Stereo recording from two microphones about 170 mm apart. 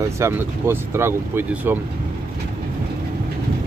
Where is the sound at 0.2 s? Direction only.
15° right (ahead or behind).